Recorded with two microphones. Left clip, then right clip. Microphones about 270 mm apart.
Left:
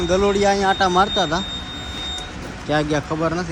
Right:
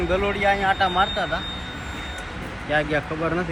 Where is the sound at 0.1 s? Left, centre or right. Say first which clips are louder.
Left 5 dB; centre.